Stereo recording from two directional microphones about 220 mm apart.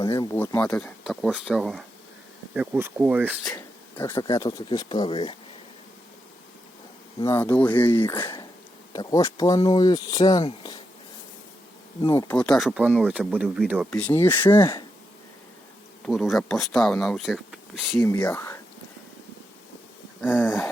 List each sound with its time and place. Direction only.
0.0 s speech: 15° left (ahead or behind); by 3.3 s 10° right (ahead or behind)
3.5 s speech: 10° left (ahead or behind)
7.2 s speech: 10° left (ahead or behind)
12.1 s speech: 5° left (ahead or behind)
13.9 s speech: 10° left (ahead or behind)
16.0 s speech: centre (ahead or behind)
18.0 s speech: 10° left (ahead or behind)